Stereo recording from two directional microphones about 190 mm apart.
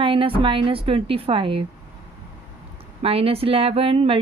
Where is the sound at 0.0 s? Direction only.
30° right (ahead or behind).